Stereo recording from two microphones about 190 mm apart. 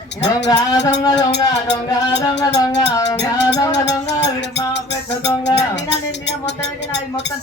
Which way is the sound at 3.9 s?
65° left (ahead or behind).